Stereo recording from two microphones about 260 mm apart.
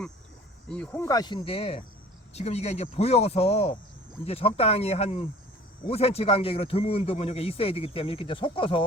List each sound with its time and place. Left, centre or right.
0.7 s a man's voice: centre